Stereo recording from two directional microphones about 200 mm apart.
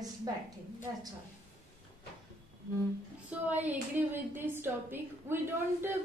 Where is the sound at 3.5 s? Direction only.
10° right (ahead or behind).